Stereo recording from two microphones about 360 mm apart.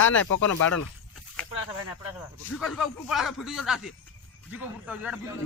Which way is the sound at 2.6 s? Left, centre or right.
Centre.